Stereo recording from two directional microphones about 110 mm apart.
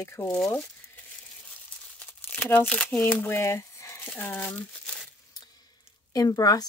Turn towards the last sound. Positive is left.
turn(degrees=35)  # may be behind; listen again after turning